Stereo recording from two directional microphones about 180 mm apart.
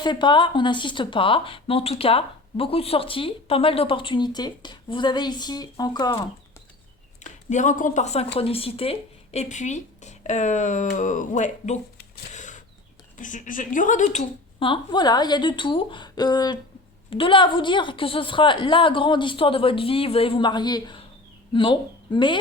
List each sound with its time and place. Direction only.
0.0 s speech: 25° left (ahead or behind)
7.3 s speech: 45° left (ahead or behind)
12.3 s a sound: 45° left (ahead or behind)
13.1 s speech: 45° left (ahead or behind); by 22.4 s 25° left (ahead or behind)